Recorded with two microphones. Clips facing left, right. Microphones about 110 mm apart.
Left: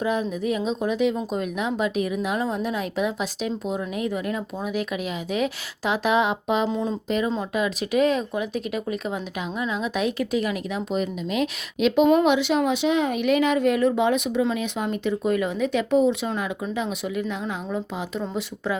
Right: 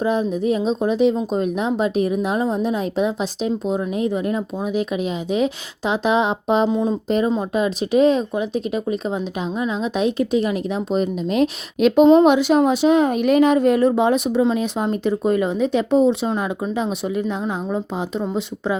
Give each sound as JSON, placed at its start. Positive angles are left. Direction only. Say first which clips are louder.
{"t": 0.0, "sound": "a woman's voice", "louder": "right 5 dB", "side_deg": -30}
{"t": 6.7, "sound": "a woman's voice", "louder": "right 6 dB", "side_deg": -20}
{"t": 7.5, "sound": "a woman's voice", "louder": "right 4 dB", "side_deg": -30}